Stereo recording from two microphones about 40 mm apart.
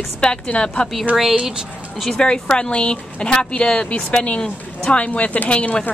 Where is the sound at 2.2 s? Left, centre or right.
Left.